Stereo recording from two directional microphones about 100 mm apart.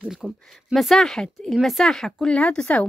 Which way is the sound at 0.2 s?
5° right (ahead or behind).